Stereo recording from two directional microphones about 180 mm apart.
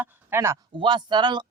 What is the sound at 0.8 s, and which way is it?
Speech, 25° right (ahead or behind).